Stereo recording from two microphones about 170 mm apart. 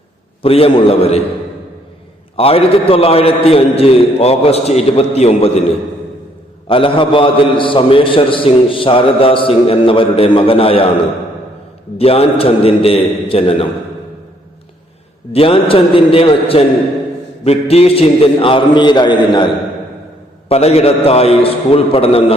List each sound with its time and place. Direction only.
0.4 s a man's voice: 35° left (ahead or behind)
2.3 s a man's voice: 35° left (ahead or behind)
6.7 s a man's voice: 30° left (ahead or behind)
11.9 s a man's voice: 35° left (ahead or behind)
15.3 s a man's voice: 35° left (ahead or behind)
20.5 s a man's voice: 40° left (ahead or behind)